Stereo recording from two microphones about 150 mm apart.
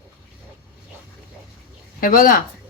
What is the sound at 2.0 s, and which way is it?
Speech, 70° left (ahead or behind).